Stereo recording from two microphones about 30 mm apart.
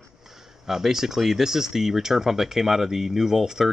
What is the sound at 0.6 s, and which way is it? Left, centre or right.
Speech, centre.